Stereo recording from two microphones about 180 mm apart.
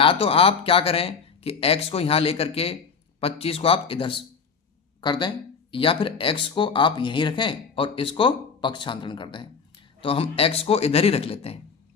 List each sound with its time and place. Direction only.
0.0 s speech: 30° left (ahead or behind)